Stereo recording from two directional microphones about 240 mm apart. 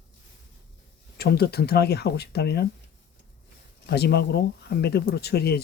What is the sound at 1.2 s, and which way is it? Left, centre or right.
Speech, left.